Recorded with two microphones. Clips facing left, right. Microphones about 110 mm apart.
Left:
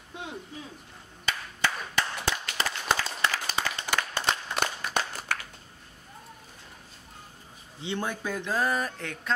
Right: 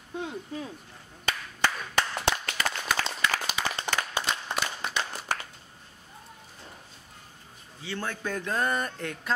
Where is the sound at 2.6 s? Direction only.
30° left (ahead or behind).